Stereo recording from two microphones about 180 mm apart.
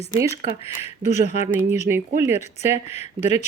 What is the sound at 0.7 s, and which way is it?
Speech, 40° left (ahead or behind).